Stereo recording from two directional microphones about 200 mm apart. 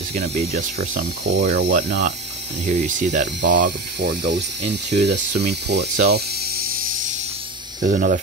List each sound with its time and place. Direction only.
0.6 s speech: 40° right (ahead or behind)
1.2 s speech: 60° right (ahead or behind)
2.6 s speech: 35° right (ahead or behind)
3.4 s speech: 55° right (ahead or behind)